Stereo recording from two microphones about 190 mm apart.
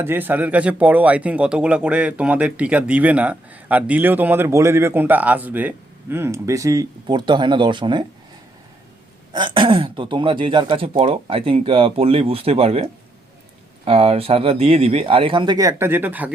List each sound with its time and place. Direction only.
0.0 s speech: 10° right (ahead or behind)
9.3 s speech: 25° right (ahead or behind); by 16.3 s 10° right (ahead or behind)